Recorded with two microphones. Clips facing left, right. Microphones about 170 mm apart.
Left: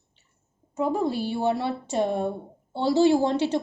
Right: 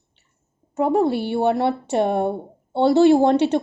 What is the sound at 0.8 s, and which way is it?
A woman's voice, 65° right (ahead or behind).